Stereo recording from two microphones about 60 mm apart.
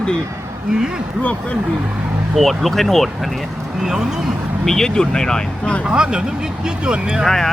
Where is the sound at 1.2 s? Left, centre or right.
Left.